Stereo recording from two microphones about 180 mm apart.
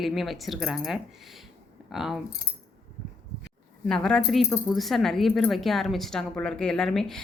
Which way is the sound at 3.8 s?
5° left (ahead or behind).